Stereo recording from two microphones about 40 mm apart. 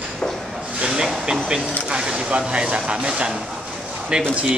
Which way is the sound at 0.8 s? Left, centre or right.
Centre.